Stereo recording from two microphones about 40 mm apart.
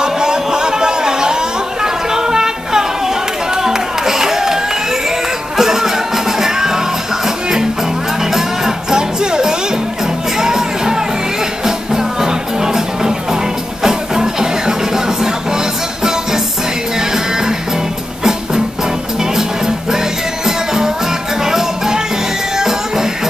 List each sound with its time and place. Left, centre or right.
0.0 s a sound: centre
3.6 s music: centre
5.6 s music: centre
8.2 s music: centre
19.3 s music: centre